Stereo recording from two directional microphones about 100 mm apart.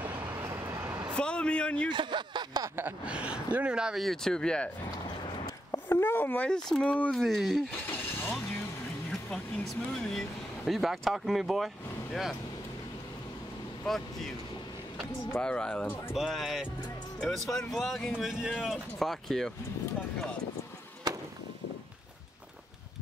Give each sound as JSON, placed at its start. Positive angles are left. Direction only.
{"t": 0.0, "sound": "vehicle", "side_deg": -25}
{"t": 1.1, "sound": "speech", "side_deg": 10}
{"t": 1.9, "sound": "speech", "side_deg": -50}
{"t": 3.1, "sound": "speech", "side_deg": -10}
{"t": 5.9, "sound": "speech", "side_deg": 20}
{"t": 9.3, "sound": "speech", "side_deg": 0}
{"t": 13.9, "sound": "speech", "side_deg": 5}
{"t": 15.4, "sound": "speech", "side_deg": 10}
{"t": 16.1, "sound": "speech", "side_deg": 0}